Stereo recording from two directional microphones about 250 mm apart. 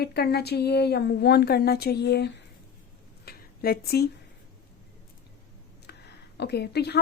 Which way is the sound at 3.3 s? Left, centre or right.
Left.